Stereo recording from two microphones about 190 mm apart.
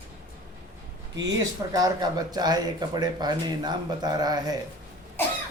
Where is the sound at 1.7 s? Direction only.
20° right (ahead or behind).